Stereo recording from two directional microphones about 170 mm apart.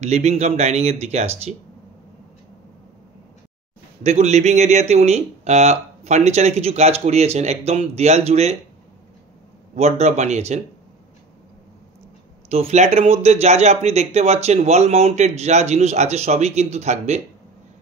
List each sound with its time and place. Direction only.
0.0 s speech: 40° right (ahead or behind)
4.0 s speech: 40° right (ahead or behind)
9.8 s speech: 40° right (ahead or behind)
12.4 s speech: 35° right (ahead or behind)